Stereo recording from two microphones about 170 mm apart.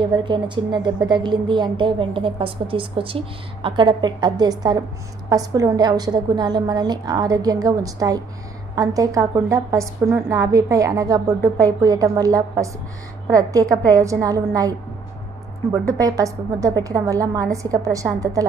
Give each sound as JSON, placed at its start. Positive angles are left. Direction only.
{"t": 0.0, "sound": "a woman's voice", "side_deg": -25}